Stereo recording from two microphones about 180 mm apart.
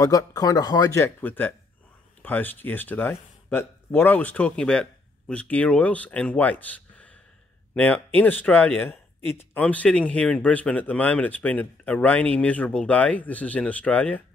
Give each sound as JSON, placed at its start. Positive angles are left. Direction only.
{"t": 0.0, "sound": "a man's voice", "side_deg": 20}